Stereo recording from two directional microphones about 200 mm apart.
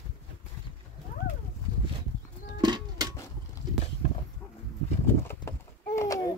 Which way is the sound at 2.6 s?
20° right (ahead or behind).